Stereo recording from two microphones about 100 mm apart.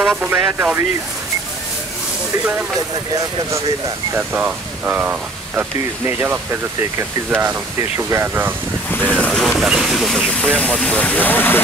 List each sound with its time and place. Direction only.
0.0 s speech: 15° right (ahead or behind)
4.1 s speech: 20° right (ahead or behind)
8.9 s speech: 15° left (ahead or behind)
9.3 s speech: 5° left (ahead or behind); by 11.6 s 20° left (ahead or behind)